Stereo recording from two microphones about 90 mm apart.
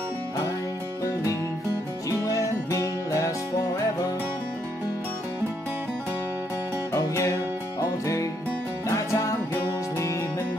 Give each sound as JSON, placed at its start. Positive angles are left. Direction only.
{"t": 2.0, "sound": "music", "side_deg": 40}
{"t": 6.9, "sound": "music", "side_deg": 35}
{"t": 8.8, "sound": "music", "side_deg": 35}